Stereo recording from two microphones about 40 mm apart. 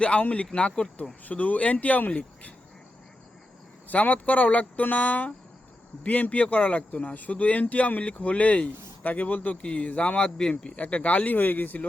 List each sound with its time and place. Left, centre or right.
0.0 s a man's voice: left
1.2 s speech: left
3.8 s speech: left
9.6 s a man's voice: left